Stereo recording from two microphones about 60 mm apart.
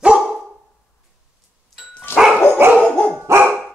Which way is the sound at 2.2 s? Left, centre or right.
Centre.